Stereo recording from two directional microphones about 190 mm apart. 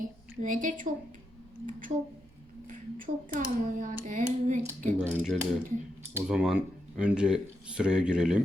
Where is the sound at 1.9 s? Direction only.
45° right (ahead or behind).